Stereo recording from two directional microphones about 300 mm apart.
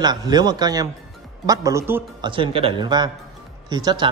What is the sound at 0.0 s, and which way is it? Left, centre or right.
A man's voice, centre.